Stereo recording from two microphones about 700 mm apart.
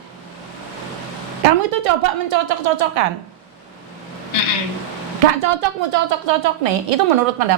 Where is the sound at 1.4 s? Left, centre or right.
Right.